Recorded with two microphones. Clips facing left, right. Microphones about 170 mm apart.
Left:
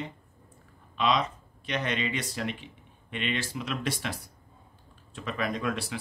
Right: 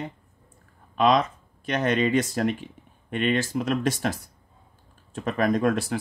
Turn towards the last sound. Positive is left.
turn(degrees=-45)  # may be behind; listen again after turning